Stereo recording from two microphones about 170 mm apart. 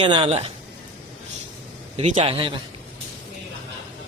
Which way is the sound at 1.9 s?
35° right (ahead or behind).